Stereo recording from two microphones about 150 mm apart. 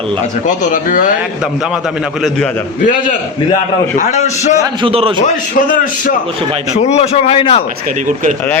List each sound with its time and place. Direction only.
0.4 s a man's voice: 60° left (ahead or behind)
2.8 s a man's voice: 65° left (ahead or behind)
3.9 s a man's voice: 55° left (ahead or behind)
4.6 s a man's voice: 35° right (ahead or behind)
5.2 s a man's voice: 60° left (ahead or behind)
6.7 s a man's voice: 45° left (ahead or behind)